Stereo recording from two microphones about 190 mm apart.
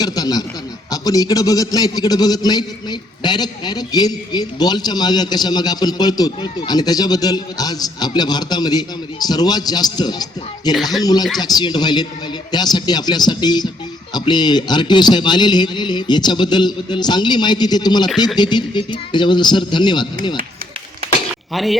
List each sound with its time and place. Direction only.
0.0 s a man's voice: 20° left (ahead or behind)
21.5 s speech: centre (ahead or behind)